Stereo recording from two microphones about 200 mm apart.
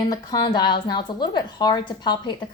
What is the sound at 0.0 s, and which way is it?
A woman's voice, 20° left (ahead or behind).